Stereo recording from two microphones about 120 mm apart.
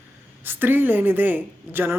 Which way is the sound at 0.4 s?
15° right (ahead or behind).